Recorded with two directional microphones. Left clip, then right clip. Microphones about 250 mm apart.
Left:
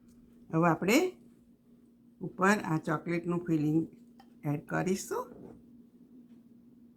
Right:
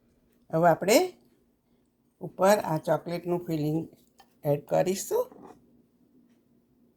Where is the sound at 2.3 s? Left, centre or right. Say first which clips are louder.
Right 6 dB; right.